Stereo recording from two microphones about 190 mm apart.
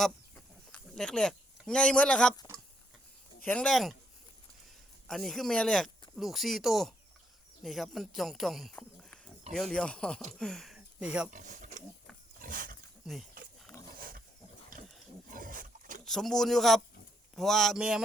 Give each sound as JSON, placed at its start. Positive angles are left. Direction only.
{"t": 0.7, "sound": "speech", "side_deg": 5}
{"t": 3.4, "sound": "speech", "side_deg": 5}
{"t": 5.0, "sound": "speech", "side_deg": 0}
{"t": 11.3, "sound": "mechanisms", "side_deg": -45}
{"t": 12.4, "sound": "wild animals", "side_deg": -45}
{"t": 13.0, "sound": "speech", "side_deg": 0}
{"t": 14.7, "sound": "wild animals", "side_deg": -45}
{"t": 16.0, "sound": "speech", "side_deg": 0}